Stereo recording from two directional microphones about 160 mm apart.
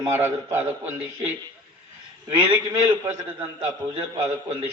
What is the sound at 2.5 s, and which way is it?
Speech, 10° right (ahead or behind).